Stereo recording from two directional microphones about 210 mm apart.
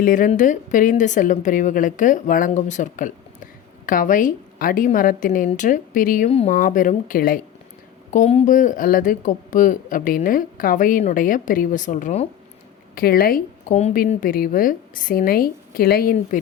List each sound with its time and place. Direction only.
0.0 s a woman's voice: 40° left (ahead or behind)
8.1 s a woman's voice: 30° left (ahead or behind)
13.0 s speech: 45° left (ahead or behind)